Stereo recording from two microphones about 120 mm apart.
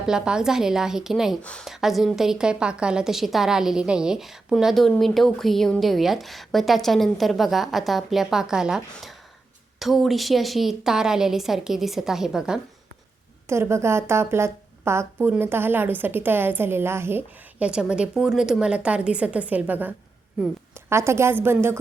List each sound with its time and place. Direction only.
0.0 s a woman's voice: 5° right (ahead or behind)
1.4 s speech: 10° left (ahead or behind)
1.6 s a woman's voice: centre (ahead or behind)
13.5 s a woman's voice: 20° right (ahead or behind)
17.7 s a woman's voice: 5° right (ahead or behind)